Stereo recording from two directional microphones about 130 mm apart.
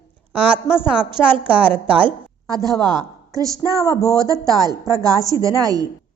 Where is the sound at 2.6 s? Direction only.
30° right (ahead or behind).